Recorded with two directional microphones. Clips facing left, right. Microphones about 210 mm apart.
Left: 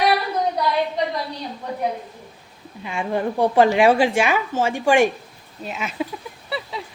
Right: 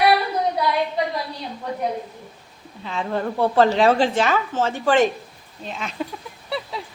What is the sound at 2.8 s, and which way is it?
A woman's voice, 10° left (ahead or behind).